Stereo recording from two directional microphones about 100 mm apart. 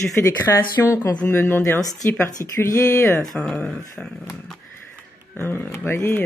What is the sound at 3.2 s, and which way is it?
Speech, 10° left (ahead or behind).